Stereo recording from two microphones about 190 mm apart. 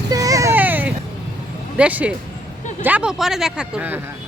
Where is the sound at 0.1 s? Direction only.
20° right (ahead or behind).